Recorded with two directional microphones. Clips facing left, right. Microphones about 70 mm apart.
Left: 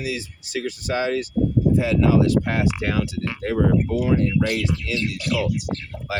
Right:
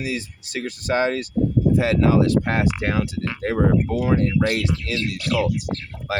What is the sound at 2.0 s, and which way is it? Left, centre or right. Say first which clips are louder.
Speech: even; right.